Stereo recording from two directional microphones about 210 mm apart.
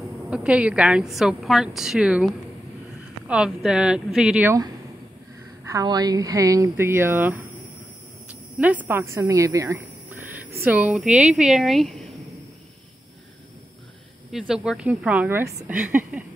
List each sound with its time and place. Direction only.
0.3 s a woman's voice: 5° right (ahead or behind)
5.7 s speech: 15° right (ahead or behind)
8.5 s a woman's voice: 5° right (ahead or behind)
14.3 s speech: 5° right (ahead or behind)